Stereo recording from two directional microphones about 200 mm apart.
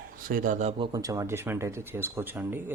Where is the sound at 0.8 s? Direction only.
15° right (ahead or behind).